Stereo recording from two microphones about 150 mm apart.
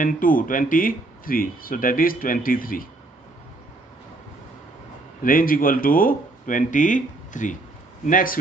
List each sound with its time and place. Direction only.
0.0 s speech: 65° left (ahead or behind)
5.2 s a man's voice: 70° left (ahead or behind)